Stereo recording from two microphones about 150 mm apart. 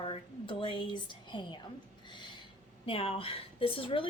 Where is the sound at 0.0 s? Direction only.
35° left (ahead or behind).